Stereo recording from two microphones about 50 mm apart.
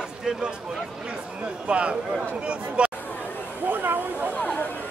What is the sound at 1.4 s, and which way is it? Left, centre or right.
Speech, right.